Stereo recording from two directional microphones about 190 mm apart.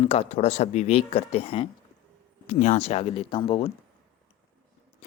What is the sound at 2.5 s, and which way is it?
Speech, 40° left (ahead or behind).